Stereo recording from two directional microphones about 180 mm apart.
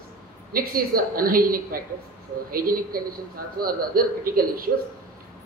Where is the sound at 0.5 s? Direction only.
55° right (ahead or behind).